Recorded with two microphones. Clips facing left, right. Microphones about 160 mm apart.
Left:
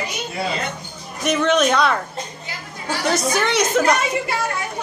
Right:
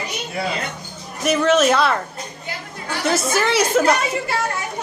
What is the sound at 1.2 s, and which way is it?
Speech, 5° right (ahead or behind).